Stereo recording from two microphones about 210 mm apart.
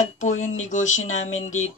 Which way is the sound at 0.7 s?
35° left (ahead or behind).